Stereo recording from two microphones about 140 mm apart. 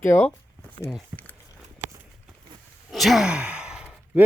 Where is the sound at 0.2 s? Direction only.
15° left (ahead or behind).